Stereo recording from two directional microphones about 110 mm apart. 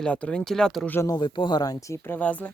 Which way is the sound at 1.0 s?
40° left (ahead or behind).